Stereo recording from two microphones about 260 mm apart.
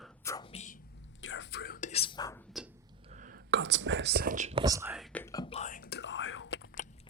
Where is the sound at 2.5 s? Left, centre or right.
Centre.